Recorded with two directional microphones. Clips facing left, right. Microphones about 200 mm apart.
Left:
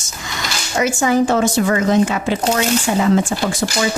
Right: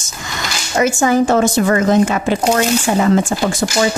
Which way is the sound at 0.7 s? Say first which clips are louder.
Right 2 dB; 45° right (ahead or behind).